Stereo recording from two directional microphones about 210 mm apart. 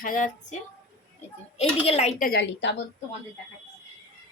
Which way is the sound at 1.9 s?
30° left (ahead or behind).